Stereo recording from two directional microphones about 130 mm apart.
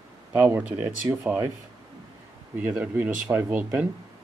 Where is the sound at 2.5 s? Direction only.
10° right (ahead or behind).